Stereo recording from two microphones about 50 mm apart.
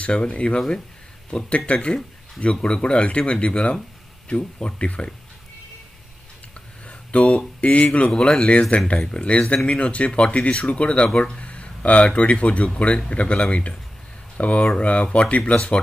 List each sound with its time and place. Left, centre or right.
0.0 s speech: left
1.7 s speech: left
6.9 s speech: left